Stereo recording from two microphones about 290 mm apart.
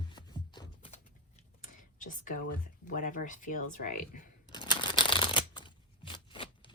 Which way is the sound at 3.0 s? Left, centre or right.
Left.